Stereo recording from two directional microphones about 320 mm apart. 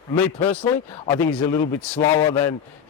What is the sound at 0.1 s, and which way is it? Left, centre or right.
Speech, centre.